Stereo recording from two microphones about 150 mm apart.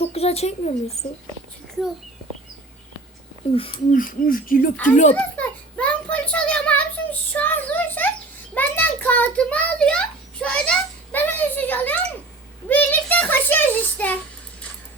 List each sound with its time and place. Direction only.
0.0 s speech: 45° left (ahead or behind)
3.5 s speech: 40° left (ahead or behind)
3.9 s speech: 70° left (ahead or behind)
5.1 s a sound: 10° left (ahead or behind)